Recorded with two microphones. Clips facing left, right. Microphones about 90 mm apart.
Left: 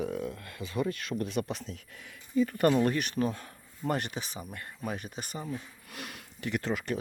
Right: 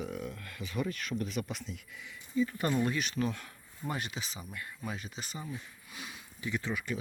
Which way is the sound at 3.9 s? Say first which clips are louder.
Left 6 dB; 55° left (ahead or behind).